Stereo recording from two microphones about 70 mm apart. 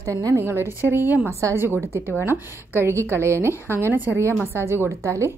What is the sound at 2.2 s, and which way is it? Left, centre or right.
A woman's voice, right.